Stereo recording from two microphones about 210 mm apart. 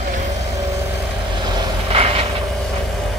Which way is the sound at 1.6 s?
30° right (ahead or behind).